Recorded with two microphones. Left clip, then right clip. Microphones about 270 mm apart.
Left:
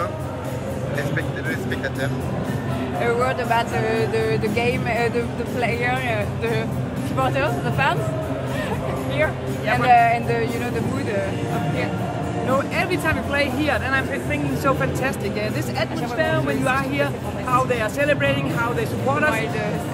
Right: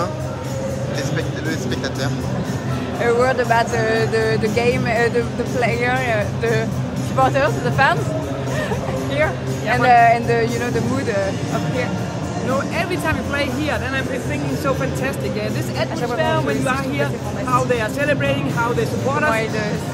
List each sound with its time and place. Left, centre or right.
3.2 s speech: right
9.1 s music: right
9.8 s speech: right
12.4 s speech: centre
15.8 s speech: centre